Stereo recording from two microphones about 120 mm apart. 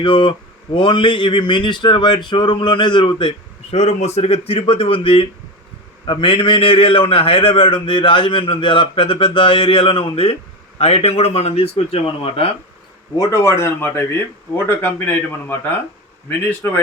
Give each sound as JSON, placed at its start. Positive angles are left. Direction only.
{"t": 0.0, "sound": "speech", "side_deg": 45}
{"t": 13.1, "sound": "speech", "side_deg": 30}